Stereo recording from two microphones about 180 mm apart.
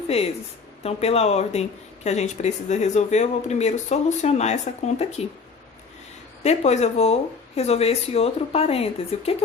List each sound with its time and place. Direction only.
0.1 s speech: 35° left (ahead or behind)
6.4 s speech: 35° left (ahead or behind)